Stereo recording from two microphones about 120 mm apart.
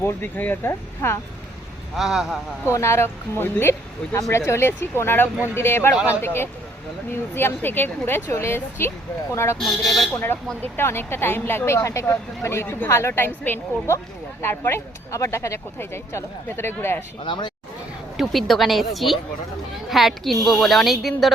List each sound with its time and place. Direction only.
0.0 s speech: 15° left (ahead or behind)
2.0 s a woman's voice: 5° right (ahead or behind)
2.6 s speech: 20° left (ahead or behind)
9.6 s a woman's voice: centre (ahead or behind)
10.1 s speech: 15° left (ahead or behind)
17.2 s speech: 40° left (ahead or behind)
18.2 s a woman's voice: centre (ahead or behind)